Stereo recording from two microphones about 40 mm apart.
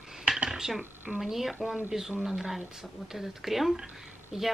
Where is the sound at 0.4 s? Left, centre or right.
Centre.